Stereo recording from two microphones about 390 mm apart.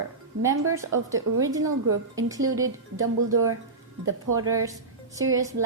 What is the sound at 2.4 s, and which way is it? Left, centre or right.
A woman's voice, right.